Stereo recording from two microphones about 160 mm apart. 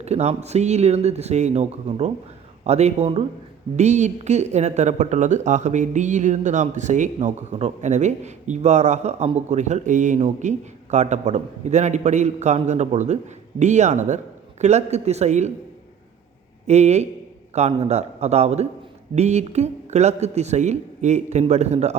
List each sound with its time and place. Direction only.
0.0 s speech: 45° right (ahead or behind)
16.6 s speech: 45° right (ahead or behind)